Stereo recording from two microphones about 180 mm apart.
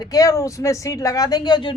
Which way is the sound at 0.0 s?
20° left (ahead or behind).